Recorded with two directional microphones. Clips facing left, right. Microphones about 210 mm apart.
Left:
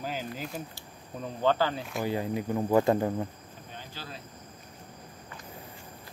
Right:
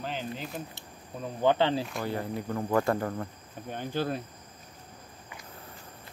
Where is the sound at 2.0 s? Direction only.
15° left (ahead or behind).